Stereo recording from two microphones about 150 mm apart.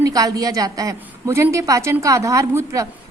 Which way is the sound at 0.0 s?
25° right (ahead or behind).